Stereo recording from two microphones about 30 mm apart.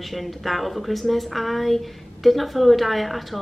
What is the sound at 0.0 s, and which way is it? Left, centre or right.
A woman's voice, centre.